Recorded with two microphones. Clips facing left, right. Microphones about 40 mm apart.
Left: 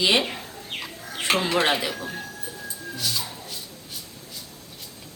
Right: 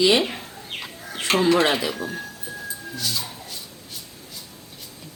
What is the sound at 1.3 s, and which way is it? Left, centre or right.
Speech, centre.